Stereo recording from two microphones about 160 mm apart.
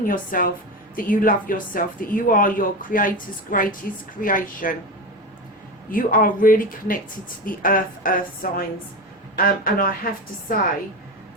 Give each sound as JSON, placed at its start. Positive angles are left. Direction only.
{"t": 0.0, "sound": "speech", "side_deg": 60}
{"t": 5.9, "sound": "speech", "side_deg": 60}